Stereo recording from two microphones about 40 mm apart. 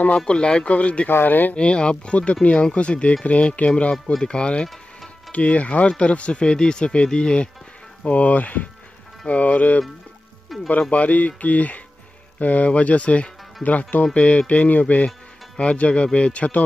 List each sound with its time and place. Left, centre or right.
0.2 s speech: left
1.2 s speech: left
1.5 s speech: left
3.9 s speech: centre
8.0 s speech: left
14.1 s speech: left
14.5 s speech: left
15.6 s speech: left